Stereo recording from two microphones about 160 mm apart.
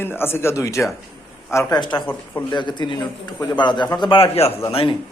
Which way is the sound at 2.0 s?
10° left (ahead or behind).